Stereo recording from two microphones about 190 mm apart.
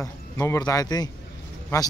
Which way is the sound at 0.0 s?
15° left (ahead or behind).